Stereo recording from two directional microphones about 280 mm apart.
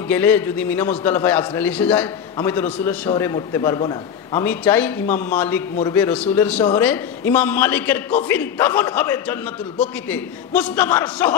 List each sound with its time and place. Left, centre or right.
0.1 s a man's voice: centre